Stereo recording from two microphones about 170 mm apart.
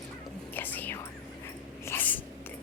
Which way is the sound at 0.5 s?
10° left (ahead or behind).